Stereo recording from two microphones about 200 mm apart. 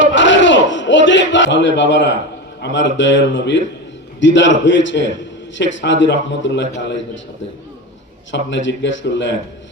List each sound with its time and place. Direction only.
0.0 s a sound: 65° left (ahead or behind)
2.6 s a man's voice: 60° left (ahead or behind)
8.3 s a man's voice: 65° left (ahead or behind)